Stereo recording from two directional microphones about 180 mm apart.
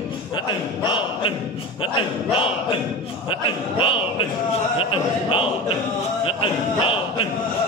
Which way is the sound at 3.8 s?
30° left (ahead or behind).